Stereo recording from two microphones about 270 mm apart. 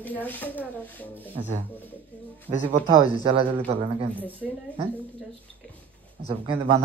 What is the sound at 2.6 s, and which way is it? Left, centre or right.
Speech, centre.